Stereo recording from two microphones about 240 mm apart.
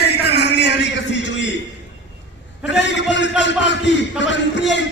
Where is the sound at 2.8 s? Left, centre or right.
Left.